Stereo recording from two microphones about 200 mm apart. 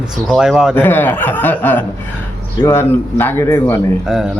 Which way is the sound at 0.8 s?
10° left (ahead or behind).